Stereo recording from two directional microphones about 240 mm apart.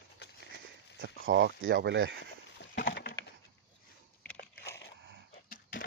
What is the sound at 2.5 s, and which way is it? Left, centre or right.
Wood, left.